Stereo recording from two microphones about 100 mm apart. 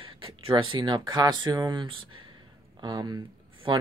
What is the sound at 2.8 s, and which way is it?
Speech, 45° right (ahead or behind).